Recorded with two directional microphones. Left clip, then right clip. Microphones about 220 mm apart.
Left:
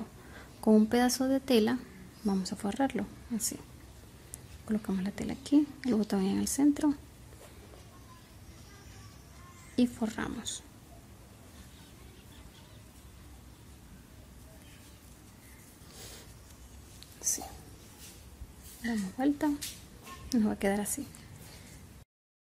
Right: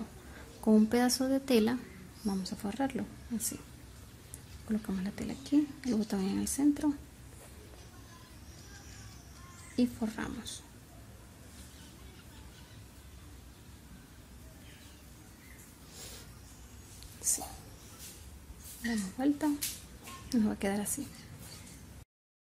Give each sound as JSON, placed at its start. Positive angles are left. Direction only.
{"t": 0.7, "sound": "a woman's voice", "side_deg": 15}
{"t": 4.6, "sound": "a woman's voice", "side_deg": 15}
{"t": 9.8, "sound": "a woman's voice", "side_deg": 15}
{"t": 18.9, "sound": "a woman's voice", "side_deg": 15}